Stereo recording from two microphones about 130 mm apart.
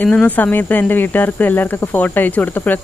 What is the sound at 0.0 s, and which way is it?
Speech, 10° left (ahead or behind).